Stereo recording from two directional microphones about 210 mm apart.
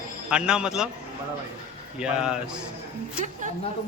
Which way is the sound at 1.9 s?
5° right (ahead or behind).